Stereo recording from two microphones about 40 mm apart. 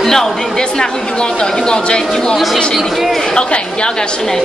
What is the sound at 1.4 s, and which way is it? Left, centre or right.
Speech, centre.